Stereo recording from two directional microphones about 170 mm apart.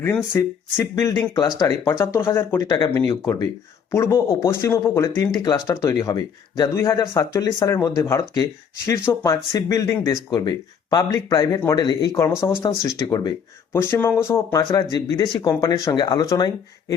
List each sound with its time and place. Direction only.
0.3 s speech: 15° left (ahead or behind)